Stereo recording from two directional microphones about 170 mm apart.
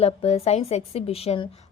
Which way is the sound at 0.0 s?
35° left (ahead or behind).